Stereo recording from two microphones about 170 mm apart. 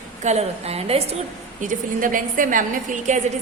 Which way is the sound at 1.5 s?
50° right (ahead or behind).